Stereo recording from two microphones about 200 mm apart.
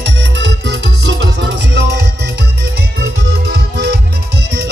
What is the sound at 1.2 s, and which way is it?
Music, 55° right (ahead or behind).